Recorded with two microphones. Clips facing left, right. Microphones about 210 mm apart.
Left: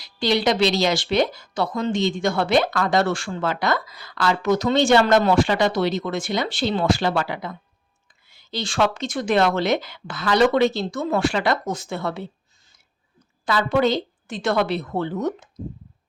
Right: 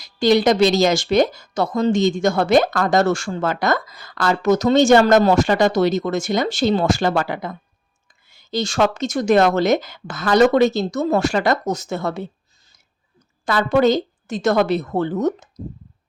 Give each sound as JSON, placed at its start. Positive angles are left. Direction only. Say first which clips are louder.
{"t": 0.0, "sound": "a woman's voice", "louder": "right 5 dB", "side_deg": -45}